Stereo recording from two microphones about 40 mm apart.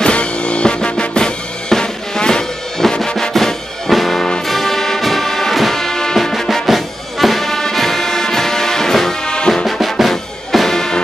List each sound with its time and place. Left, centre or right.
0.0 s music: left
2.8 s music: centre
9.2 s music: left
9.7 s music: centre